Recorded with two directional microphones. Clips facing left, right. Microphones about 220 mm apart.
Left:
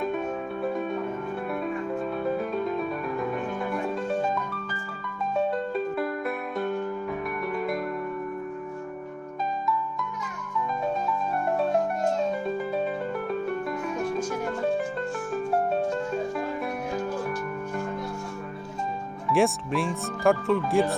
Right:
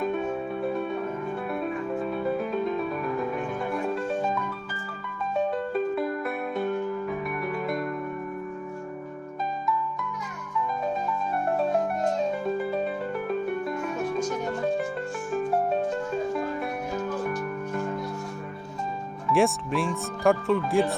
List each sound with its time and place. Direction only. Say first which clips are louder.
6.0 s music: right 1 dB; centre (ahead or behind)
19.3 s speech: even; centre (ahead or behind)